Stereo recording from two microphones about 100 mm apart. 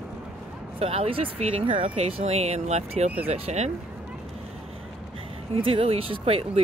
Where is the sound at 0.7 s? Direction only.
85° right.